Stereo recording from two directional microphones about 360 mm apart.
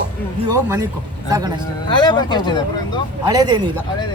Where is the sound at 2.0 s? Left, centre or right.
Centre.